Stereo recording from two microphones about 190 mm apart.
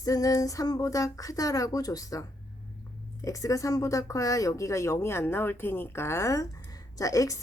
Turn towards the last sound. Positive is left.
turn(degrees=15)  # may be behind; listen again after turning